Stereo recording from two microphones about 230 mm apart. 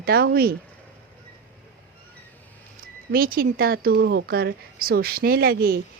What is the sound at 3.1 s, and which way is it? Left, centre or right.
A woman's voice, right.